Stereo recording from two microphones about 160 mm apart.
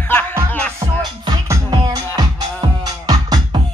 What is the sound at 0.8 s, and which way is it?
Music, 20° right (ahead or behind).